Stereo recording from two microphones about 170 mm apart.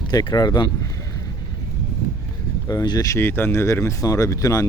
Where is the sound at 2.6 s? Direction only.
25° left (ahead or behind).